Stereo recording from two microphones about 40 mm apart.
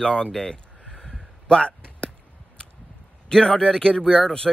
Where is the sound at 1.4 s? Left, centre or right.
Left.